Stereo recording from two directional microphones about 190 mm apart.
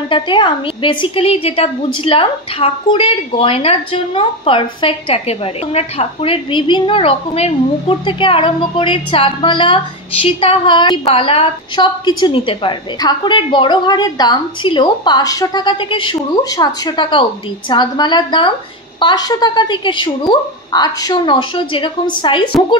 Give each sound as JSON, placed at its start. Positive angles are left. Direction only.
{"t": 0.1, "sound": "a woman's voice", "side_deg": 25}